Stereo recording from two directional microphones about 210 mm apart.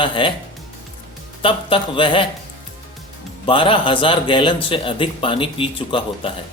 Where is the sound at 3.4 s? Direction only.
25° left (ahead or behind).